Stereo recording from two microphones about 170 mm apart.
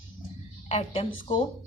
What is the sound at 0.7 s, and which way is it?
Speech, 30° left (ahead or behind).